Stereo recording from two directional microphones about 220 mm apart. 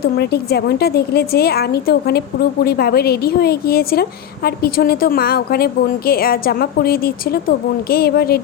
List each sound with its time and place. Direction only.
0.0 s a woman's voice: 45° left (ahead or behind)